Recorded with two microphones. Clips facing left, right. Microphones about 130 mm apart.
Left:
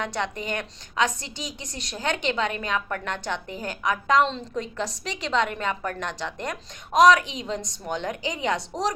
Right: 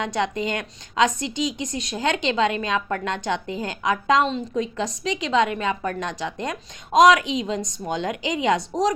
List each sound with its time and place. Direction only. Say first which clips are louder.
0.0 s a woman's voice: right 5 dB; 20° right (ahead or behind)